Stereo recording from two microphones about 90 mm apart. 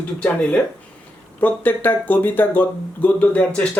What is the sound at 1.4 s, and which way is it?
Speech, 20° left (ahead or behind).